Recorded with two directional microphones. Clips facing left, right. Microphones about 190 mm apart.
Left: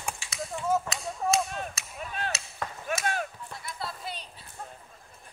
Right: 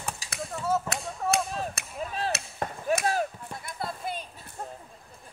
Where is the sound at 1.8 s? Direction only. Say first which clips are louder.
Right 4 dB; 55° right (ahead or behind).